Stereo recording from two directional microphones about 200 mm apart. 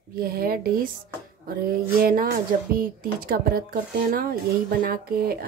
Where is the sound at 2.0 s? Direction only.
45° right (ahead or behind).